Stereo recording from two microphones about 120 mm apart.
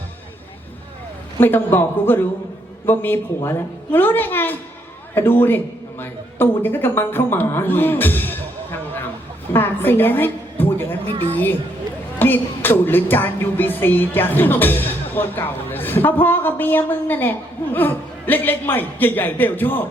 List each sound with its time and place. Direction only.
1.4 s music: 15° left (ahead or behind)
5.1 s a man's voice: 20° left (ahead or behind)
6.6 s music: 15° left (ahead or behind)
9.5 s a woman's voice: 15° left (ahead or behind)
11.0 s a woman's voice: 50° right (ahead or behind)
12.2 s music: 15° left (ahead or behind)